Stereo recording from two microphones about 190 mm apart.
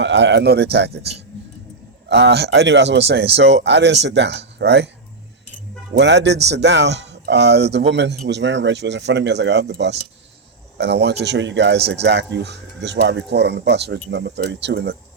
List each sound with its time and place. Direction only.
0.0 s speech: 70° right (ahead or behind)
5.9 s speech: 70° right (ahead or behind)